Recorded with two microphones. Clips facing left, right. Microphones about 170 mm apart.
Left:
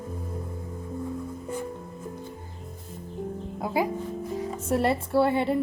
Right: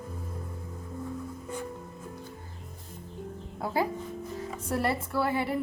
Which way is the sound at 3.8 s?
15° left (ahead or behind).